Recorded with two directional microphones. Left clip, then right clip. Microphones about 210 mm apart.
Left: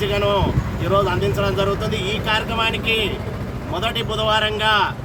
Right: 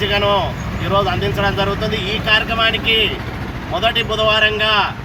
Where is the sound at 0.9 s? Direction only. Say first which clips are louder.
Right 2 dB; 35° left (ahead or behind).